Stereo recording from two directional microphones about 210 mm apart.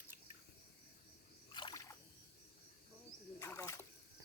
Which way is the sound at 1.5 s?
20° left (ahead or behind).